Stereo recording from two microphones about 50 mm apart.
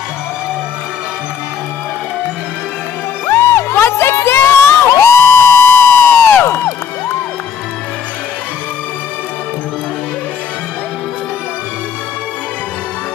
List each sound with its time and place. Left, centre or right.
3.3 s music: left